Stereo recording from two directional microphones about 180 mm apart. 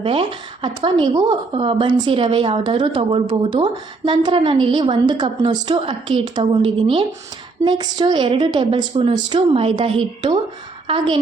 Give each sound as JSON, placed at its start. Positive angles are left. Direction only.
{"t": 0.0, "sound": "a woman's voice", "side_deg": -30}